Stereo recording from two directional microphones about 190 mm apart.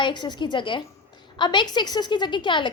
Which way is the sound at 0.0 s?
25° left (ahead or behind).